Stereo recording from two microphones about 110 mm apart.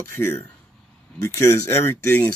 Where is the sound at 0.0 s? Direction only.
20° left (ahead or behind).